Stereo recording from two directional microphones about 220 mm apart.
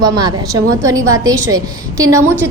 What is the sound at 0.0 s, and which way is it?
A woman's voice, 20° right (ahead or behind).